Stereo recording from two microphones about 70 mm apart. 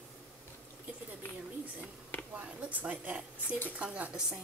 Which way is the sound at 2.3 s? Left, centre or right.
Right.